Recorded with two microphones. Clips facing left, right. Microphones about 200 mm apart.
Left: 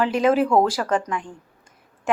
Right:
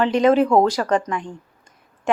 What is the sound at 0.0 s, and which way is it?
Speech, 5° left (ahead or behind).